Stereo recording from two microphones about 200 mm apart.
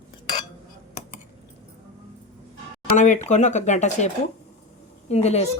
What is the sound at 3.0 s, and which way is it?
A woman's voice, 35° left (ahead or behind).